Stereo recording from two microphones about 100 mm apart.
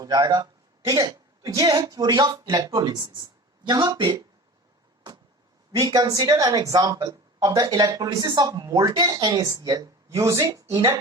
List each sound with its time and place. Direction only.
0.0 s speech: 40° right (ahead or behind)
0.9 s a sound: 40° right (ahead or behind)
1.5 s speech: 35° right (ahead or behind); by 4.2 s 50° right (ahead or behind)
5.8 s speech: 35° right (ahead or behind)